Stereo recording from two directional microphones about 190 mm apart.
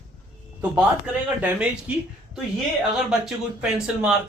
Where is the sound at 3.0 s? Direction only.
5° right (ahead or behind).